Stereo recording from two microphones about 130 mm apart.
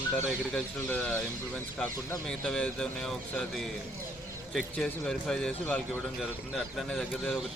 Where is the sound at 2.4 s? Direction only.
5° left (ahead or behind).